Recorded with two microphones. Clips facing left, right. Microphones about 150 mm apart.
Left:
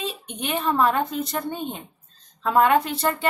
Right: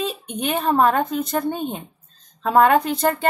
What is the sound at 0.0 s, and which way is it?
A woman's voice, 40° right (ahead or behind).